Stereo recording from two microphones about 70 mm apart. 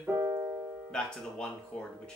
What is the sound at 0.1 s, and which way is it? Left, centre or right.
Music, right.